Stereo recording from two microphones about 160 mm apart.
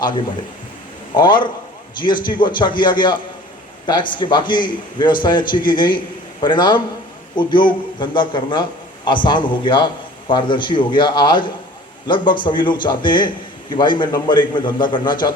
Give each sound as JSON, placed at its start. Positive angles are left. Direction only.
{"t": 1.1, "sound": "a man's voice", "side_deg": 30}